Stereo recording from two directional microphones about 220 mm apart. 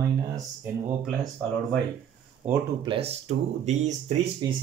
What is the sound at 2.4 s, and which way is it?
Speech, 10° right (ahead or behind).